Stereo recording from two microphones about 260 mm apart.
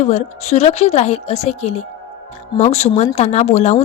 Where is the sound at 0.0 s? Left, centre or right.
Left.